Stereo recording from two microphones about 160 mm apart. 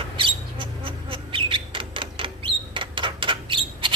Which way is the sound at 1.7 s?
35° right (ahead or behind).